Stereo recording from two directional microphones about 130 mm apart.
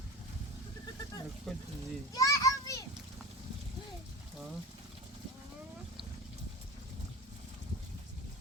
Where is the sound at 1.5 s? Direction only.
5° left (ahead or behind).